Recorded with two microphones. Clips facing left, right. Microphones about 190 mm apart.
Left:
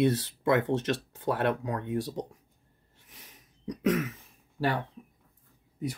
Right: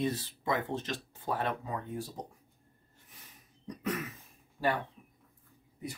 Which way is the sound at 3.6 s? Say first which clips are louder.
Left 8 dB; 90° left.